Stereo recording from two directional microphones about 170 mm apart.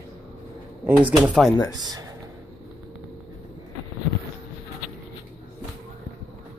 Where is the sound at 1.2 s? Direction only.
5° right (ahead or behind).